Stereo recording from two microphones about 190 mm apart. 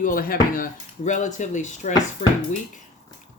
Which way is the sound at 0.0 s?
45° left (ahead or behind).